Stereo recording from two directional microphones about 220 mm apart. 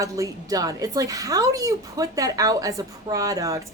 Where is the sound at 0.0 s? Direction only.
15° right (ahead or behind).